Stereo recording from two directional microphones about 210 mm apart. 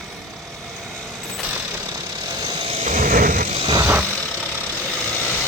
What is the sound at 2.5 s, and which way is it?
Vehicle, 30° right (ahead or behind).